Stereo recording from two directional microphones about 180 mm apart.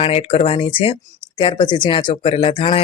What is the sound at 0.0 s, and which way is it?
Speech, 35° left (ahead or behind).